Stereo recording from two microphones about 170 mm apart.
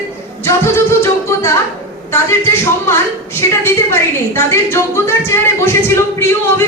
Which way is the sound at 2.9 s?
15° left (ahead or behind).